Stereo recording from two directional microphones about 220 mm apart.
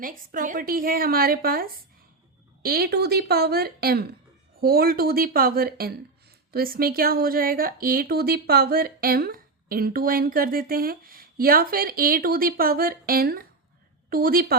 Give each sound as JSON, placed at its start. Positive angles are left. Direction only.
{"t": 0.0, "sound": "a woman's voice", "side_deg": -40}